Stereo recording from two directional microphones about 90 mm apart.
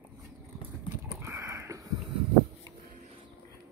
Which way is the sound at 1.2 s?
30° right (ahead or behind).